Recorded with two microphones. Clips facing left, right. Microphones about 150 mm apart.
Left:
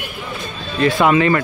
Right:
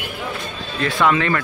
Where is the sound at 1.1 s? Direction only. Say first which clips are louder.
Left 4 dB; 5° left (ahead or behind).